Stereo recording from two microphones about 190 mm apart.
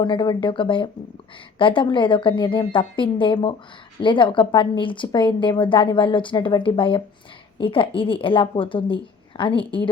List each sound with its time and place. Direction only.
0.0 s a woman's voice: 25° left (ahead or behind)